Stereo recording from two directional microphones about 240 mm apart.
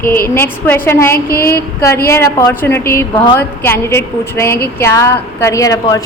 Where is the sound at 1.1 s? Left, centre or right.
Left.